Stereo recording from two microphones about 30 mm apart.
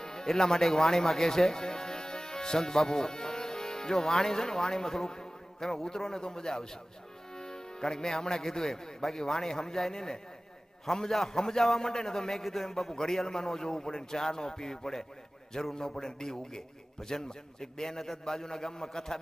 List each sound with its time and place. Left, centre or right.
0.0 s a man's voice: left